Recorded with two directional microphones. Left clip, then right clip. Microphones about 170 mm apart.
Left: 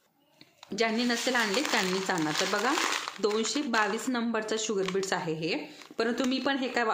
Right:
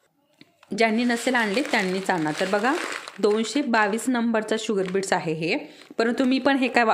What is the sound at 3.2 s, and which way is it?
A woman's voice, 40° right (ahead or behind).